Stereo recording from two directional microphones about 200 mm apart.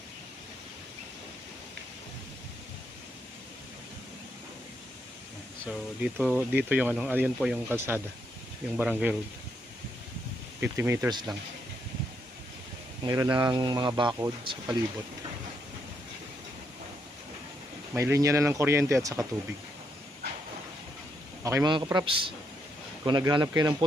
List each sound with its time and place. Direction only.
5.6 s speech: 5° right (ahead or behind)
10.6 s speech: 10° right (ahead or behind)
13.1 s speech: 15° right (ahead or behind)
17.9 s speech: 15° right (ahead or behind)
21.4 s speech: 15° right (ahead or behind)